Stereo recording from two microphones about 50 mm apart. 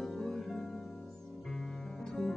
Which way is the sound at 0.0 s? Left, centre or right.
Centre.